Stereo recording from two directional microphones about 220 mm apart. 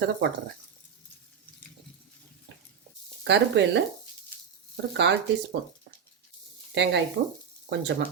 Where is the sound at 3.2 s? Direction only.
55° right (ahead or behind).